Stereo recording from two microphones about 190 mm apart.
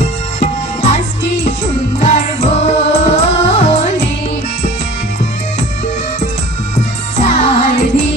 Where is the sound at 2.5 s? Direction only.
35° left (ahead or behind).